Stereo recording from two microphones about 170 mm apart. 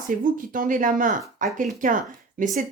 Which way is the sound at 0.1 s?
55° right (ahead or behind).